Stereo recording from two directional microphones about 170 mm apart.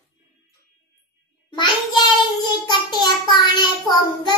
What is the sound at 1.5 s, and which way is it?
Child singing, 25° left (ahead or behind).